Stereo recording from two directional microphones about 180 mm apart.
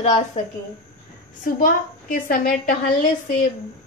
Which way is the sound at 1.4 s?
50° left (ahead or behind).